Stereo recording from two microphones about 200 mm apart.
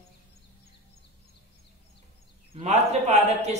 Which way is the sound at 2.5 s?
35° right (ahead or behind).